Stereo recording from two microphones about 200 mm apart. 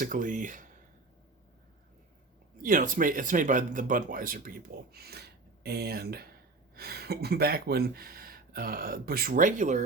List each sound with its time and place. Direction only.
0.0 s speech: 40° right (ahead or behind)
2.6 s speech: 40° right (ahead or behind)